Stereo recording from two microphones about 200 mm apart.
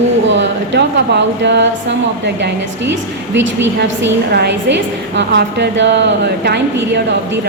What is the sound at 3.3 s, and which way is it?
A woman's voice, 65° right (ahead or behind).